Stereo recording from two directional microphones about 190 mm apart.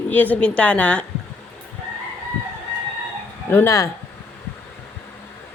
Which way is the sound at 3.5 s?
15° left (ahead or behind).